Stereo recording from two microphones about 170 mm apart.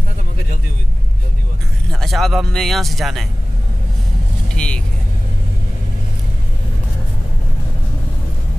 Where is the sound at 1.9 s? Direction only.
Centre (ahead or behind).